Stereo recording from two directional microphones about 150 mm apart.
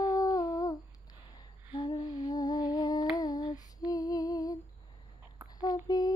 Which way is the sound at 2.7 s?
25° left (ahead or behind).